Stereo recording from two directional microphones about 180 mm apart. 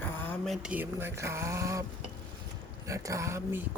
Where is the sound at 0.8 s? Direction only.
15° right (ahead or behind).